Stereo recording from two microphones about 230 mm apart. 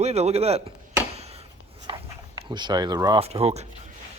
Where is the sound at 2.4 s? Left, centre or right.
Centre.